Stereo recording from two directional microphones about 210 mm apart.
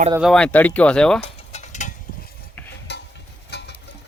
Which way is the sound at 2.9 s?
55° left (ahead or behind).